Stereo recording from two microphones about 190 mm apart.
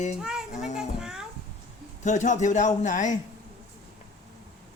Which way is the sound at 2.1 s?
40° left (ahead or behind).